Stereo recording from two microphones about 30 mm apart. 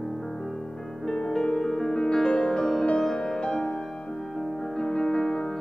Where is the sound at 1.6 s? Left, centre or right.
Centre.